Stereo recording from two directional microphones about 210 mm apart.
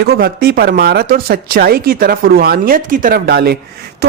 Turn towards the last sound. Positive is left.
turn(degrees=-50)  # may be behind; listen again after turning